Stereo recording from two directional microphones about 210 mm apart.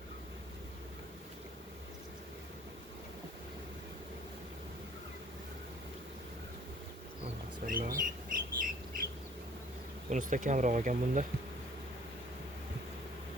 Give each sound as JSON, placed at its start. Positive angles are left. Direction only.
{"t": 7.6, "sound": "bird", "side_deg": -40}
{"t": 10.1, "sound": "speech", "side_deg": -35}